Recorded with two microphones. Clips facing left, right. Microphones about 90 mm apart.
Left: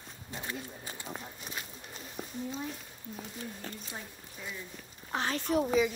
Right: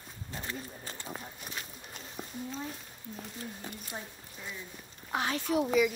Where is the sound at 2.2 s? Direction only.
10° left (ahead or behind).